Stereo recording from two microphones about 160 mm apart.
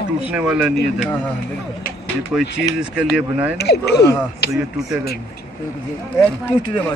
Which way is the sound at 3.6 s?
90° left.